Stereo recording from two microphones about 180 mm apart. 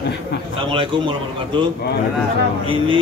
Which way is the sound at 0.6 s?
25° right (ahead or behind).